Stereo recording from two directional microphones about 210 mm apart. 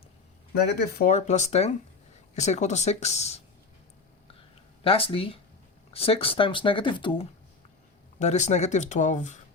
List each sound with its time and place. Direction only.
0.5 s speech: 50° left (ahead or behind); by 3.4 s 30° left (ahead or behind)
4.8 s speech: 25° left (ahead or behind)